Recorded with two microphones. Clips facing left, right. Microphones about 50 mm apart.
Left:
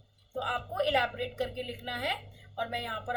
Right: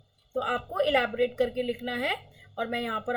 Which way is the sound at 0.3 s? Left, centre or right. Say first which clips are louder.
Right 4 dB; right.